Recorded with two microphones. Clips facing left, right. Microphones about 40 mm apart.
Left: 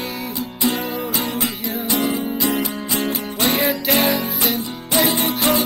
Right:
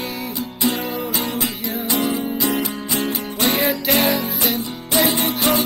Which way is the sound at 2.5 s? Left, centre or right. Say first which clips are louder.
Even; left.